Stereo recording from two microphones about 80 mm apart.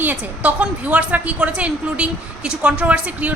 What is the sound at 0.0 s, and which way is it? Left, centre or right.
A woman's voice, right.